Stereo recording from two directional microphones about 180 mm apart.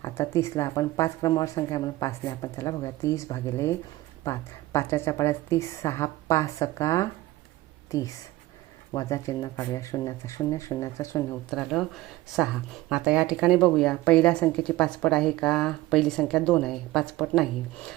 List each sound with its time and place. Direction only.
0.0 s speech: 15° left (ahead or behind)
11.5 s speech: centre (ahead or behind)